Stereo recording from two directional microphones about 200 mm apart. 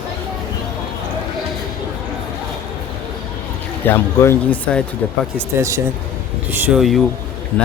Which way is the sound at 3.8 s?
10° left (ahead or behind).